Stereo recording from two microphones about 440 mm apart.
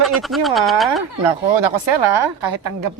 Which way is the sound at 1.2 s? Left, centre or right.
Right.